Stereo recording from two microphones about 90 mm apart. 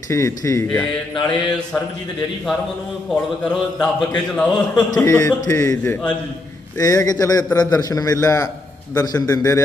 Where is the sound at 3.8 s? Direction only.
5° left (ahead or behind).